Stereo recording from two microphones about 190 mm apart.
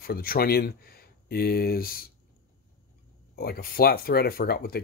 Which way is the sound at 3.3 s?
50° left (ahead or behind).